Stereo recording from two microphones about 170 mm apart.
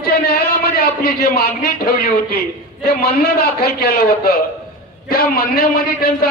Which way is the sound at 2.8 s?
65° left (ahead or behind).